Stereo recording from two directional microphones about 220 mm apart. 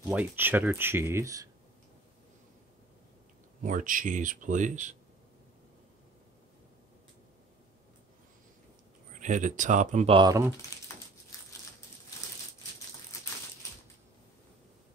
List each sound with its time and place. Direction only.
0.1 s speech: 10° right (ahead or behind)
3.6 s speech: 35° right (ahead or behind)
9.2 s speech: 35° right (ahead or behind); by 10.5 s 15° right (ahead or behind)